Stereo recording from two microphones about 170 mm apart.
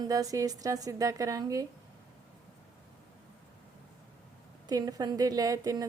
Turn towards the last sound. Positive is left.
turn(degrees=-20)  # may be behind; listen again after turning